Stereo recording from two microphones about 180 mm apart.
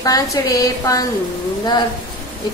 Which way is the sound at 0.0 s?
20° left (ahead or behind).